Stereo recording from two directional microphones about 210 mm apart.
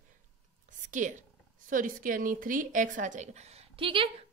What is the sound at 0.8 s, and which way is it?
A woman's voice, 35° right (ahead or behind).